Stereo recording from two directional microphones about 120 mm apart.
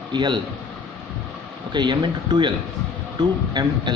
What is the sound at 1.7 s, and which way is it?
Speech, 40° right (ahead or behind).